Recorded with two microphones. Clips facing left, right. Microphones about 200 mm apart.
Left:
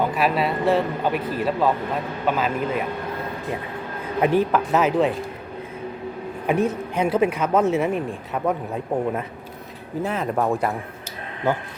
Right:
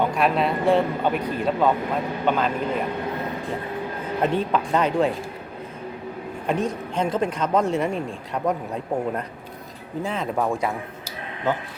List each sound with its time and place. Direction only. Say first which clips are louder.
0.0 s speech: even; 5° left (ahead or behind)
4.5 s speech: left 2 dB; 5° left (ahead or behind)
6.5 s speech: left 3 dB; 10° left (ahead or behind)